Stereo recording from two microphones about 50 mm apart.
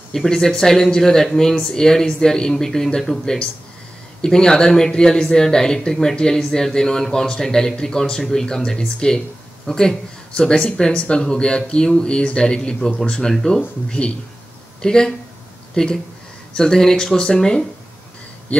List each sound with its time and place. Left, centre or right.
0.1 s a man's voice: centre; by 18.6 s left